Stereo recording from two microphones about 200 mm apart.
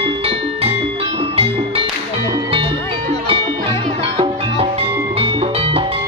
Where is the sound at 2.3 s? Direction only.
25° right (ahead or behind).